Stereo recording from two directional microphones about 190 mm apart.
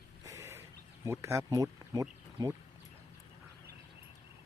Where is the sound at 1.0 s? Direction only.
15° right (ahead or behind).